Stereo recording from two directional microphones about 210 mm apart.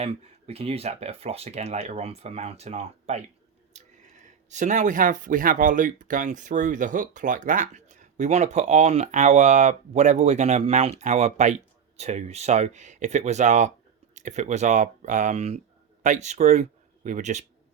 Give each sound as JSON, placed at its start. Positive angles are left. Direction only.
{"t": 0.0, "sound": "speech", "side_deg": -30}